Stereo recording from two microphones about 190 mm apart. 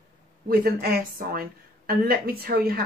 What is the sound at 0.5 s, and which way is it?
Speech, 50° right (ahead or behind).